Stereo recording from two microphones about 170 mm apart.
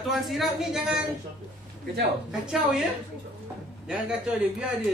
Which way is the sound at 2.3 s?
5° right (ahead or behind).